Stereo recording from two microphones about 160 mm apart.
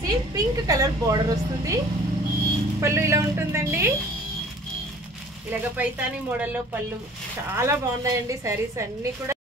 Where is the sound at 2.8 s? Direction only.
15° right (ahead or behind).